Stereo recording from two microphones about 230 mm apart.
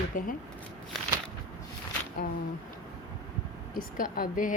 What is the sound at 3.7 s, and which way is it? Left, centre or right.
Speech, left.